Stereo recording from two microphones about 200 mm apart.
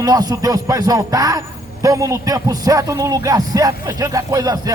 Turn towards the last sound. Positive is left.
turn(degrees=-20)  # may be behind; listen again after turning